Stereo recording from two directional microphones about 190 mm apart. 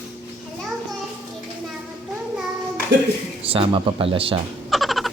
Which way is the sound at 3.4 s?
30° right (ahead or behind).